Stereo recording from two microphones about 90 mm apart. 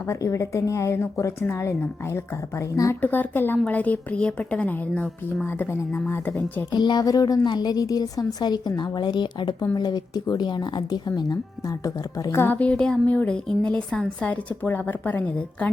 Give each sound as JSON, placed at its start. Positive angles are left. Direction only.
{"t": 0.1, "sound": "speech", "side_deg": 35}
{"t": 3.0, "sound": "a woman's voice", "side_deg": 20}
{"t": 5.9, "sound": "speech", "side_deg": 25}
{"t": 6.7, "sound": "a woman's voice", "side_deg": 55}
{"t": 12.2, "sound": "speech", "side_deg": 30}
{"t": 12.5, "sound": "a woman's voice", "side_deg": 10}